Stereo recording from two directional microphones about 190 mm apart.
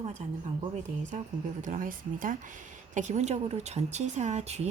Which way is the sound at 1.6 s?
45° right (ahead or behind).